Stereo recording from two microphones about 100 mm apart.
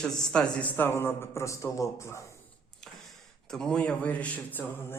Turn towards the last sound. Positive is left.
turn(degrees=20)  # may be behind; listen again after turning